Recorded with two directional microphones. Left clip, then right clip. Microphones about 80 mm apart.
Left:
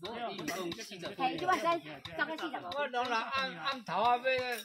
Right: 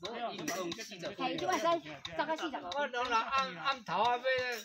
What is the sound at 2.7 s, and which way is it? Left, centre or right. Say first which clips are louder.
A man's voice: right 1 dB; centre.